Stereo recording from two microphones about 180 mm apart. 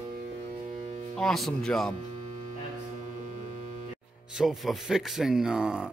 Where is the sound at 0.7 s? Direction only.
40° right (ahead or behind).